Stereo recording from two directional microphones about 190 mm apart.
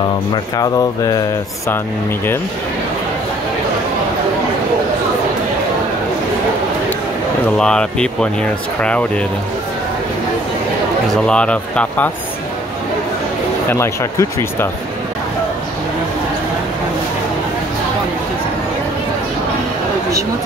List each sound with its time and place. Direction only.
0.6 s speech: 20° left (ahead or behind)
7.5 s speech: 5° left (ahead or behind)
11.2 s speech: 5° left (ahead or behind)
13.7 s speech: 15° left (ahead or behind)